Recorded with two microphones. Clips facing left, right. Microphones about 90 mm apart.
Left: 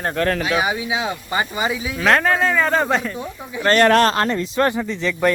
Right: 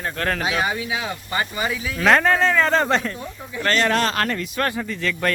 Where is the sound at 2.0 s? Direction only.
Centre (ahead or behind).